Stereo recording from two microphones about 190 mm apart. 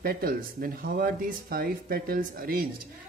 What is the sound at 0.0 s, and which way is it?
Speech, 50° right (ahead or behind).